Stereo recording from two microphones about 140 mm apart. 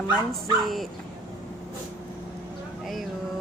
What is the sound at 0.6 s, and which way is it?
Speech, centre (ahead or behind).